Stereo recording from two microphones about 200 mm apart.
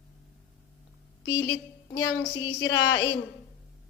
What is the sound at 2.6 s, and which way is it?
Speech, 65° left (ahead or behind).